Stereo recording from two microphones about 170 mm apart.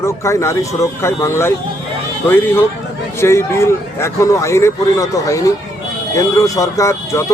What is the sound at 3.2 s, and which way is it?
A man's voice, 15° left (ahead or behind).